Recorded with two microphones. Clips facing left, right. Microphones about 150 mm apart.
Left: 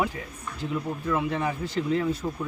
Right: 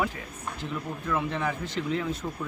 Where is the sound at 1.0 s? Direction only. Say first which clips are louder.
Left 1 dB; 10° left (ahead or behind).